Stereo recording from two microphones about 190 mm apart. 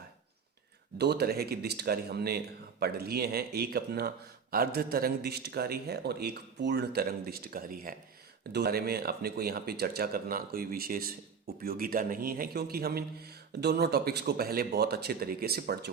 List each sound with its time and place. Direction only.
0.9 s speech: 60° right (ahead or behind)